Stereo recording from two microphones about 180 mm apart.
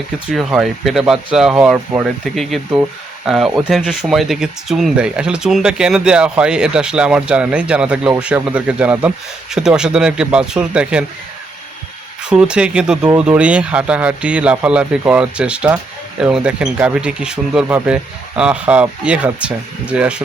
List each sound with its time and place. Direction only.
0.3 s speech: 5° right (ahead or behind)
12.2 s speech: 5° right (ahead or behind)